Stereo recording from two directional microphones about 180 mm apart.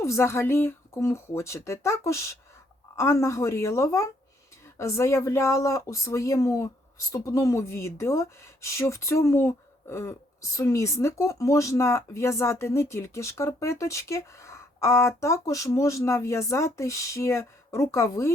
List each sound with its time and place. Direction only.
0.0 s speech: 15° left (ahead or behind)